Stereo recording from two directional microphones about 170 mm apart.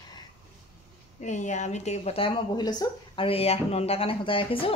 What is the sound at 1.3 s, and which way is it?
A woman's voice, 45° left (ahead or behind).